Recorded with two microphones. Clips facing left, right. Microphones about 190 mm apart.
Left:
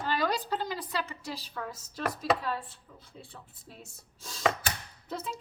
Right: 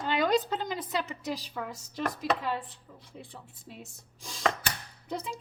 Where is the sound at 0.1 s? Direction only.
20° right (ahead or behind).